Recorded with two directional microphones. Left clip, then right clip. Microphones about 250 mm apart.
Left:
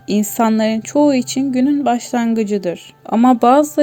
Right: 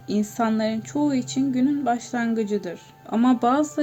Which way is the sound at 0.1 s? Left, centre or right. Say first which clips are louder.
Left 8 dB; left.